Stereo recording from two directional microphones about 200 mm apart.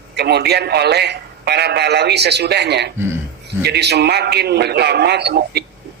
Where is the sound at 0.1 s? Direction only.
55° right (ahead or behind).